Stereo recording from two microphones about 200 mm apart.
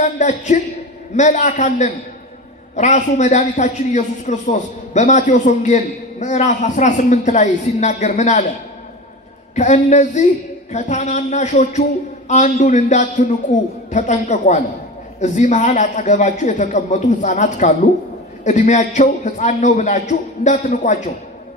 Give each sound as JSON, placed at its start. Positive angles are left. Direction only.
{"t": 0.0, "sound": "a man's voice", "side_deg": 40}
{"t": 9.6, "sound": "a man's voice", "side_deg": 35}